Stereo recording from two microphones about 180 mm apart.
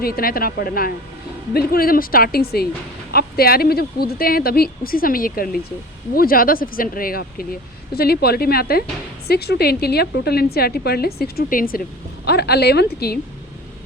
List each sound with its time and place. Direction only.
0.0 s a woman's voice: 55° left (ahead or behind)
12.2 s a woman's voice: 65° left (ahead or behind)